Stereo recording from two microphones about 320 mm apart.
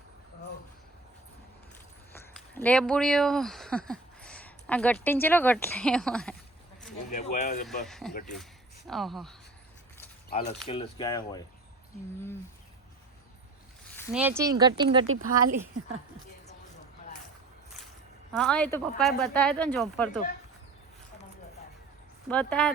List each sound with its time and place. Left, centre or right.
2.1 s speech: centre
7.1 s speech: left
7.9 s speech: centre
10.7 s speech: centre
13.9 s a sound: centre
14.2 s speech: centre
15.0 s speech: right
18.3 s speech: centre
22.3 s speech: centre